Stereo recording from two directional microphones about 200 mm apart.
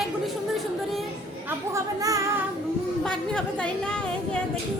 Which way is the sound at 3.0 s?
5° left (ahead or behind).